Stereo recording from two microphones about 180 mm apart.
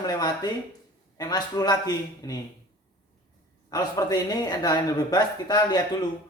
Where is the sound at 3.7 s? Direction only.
20° left (ahead or behind).